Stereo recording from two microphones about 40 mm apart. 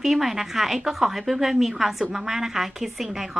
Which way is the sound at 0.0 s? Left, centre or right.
Centre.